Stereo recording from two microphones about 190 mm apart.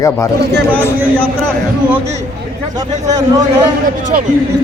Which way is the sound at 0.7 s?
5° left (ahead or behind).